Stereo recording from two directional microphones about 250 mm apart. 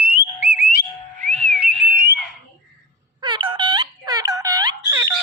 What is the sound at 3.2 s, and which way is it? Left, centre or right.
Music, centre.